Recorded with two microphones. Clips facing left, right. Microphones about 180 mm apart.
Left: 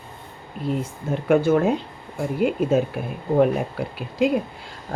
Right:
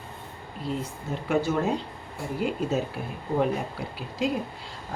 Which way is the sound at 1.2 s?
50° left (ahead or behind).